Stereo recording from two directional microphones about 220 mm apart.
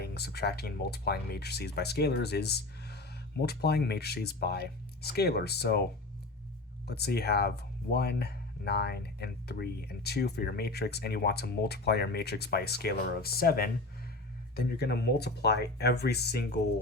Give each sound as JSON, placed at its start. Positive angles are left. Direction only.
{"t": 0.0, "sound": "speech", "side_deg": 45}
{"t": 6.8, "sound": "speech", "side_deg": 45}